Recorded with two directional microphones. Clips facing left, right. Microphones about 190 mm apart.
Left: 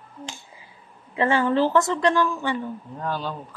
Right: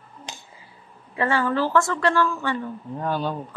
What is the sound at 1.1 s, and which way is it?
A woman's voice, 20° left (ahead or behind).